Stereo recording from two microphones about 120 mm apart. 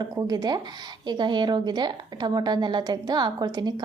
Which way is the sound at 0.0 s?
35° right (ahead or behind).